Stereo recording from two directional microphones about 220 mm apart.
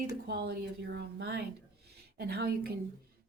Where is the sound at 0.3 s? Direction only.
45° right (ahead or behind).